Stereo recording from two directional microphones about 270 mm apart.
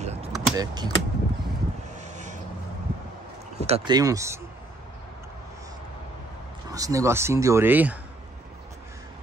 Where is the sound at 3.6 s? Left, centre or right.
Centre.